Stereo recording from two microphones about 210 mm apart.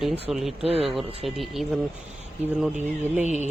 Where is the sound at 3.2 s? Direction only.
35° right (ahead or behind).